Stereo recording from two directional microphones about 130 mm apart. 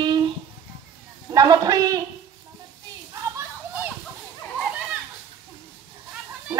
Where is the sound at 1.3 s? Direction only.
30° right (ahead or behind).